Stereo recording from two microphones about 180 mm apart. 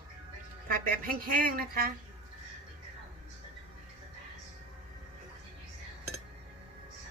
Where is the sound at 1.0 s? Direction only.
50° right (ahead or behind).